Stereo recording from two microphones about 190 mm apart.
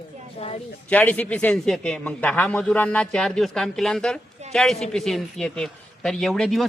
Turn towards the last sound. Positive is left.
turn(degrees=0)  # may be behind; listen again after turning